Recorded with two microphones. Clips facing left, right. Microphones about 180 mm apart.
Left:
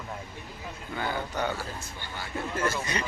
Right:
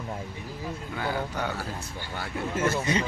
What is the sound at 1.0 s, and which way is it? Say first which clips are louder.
Speech: even; 5° right (ahead or behind).